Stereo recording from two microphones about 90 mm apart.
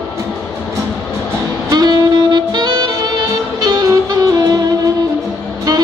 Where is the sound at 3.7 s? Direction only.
45° right (ahead or behind).